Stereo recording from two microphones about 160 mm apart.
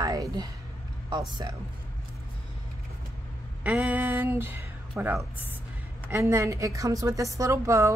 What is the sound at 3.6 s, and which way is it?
A woman's voice, 10° right (ahead or behind).